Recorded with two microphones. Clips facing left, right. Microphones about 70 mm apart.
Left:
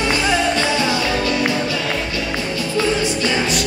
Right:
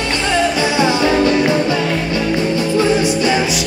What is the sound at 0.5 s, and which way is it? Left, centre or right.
Music, right.